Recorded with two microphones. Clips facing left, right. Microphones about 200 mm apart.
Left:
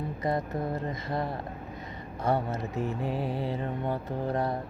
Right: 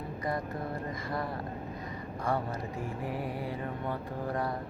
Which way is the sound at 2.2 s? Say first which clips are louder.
Left 4 dB; 25° left (ahead or behind).